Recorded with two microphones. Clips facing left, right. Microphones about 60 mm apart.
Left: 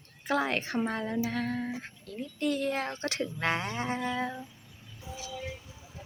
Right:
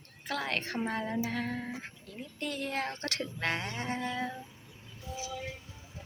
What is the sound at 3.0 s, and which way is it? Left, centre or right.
Speech, centre.